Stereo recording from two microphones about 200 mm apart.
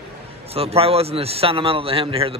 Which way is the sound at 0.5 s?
30° right (ahead or behind).